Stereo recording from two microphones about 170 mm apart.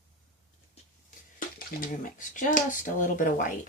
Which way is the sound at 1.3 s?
55° left (ahead or behind).